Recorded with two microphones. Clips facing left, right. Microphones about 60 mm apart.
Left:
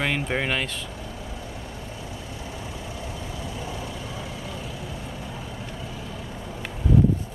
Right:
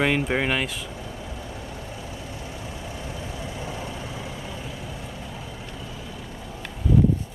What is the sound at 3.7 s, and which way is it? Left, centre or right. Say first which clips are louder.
Vehicle: right 1 dB; right.